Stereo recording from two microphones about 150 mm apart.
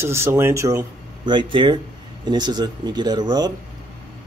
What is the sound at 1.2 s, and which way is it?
A man's voice, 35° right (ahead or behind).